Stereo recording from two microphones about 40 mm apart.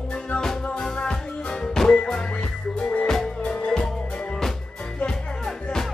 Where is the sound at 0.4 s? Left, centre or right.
Centre.